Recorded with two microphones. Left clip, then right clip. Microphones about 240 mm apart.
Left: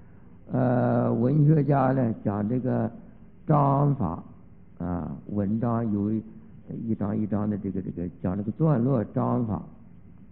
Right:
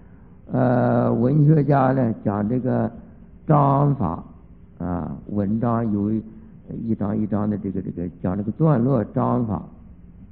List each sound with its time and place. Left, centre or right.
0.5 s speech: left